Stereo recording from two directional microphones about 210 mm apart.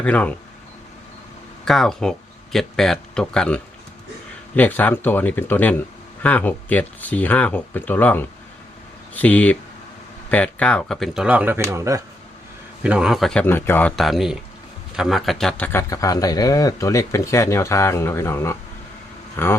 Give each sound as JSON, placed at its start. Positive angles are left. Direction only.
{"t": 0.0, "sound": "speech", "side_deg": 5}
{"t": 1.6, "sound": "speech", "side_deg": 0}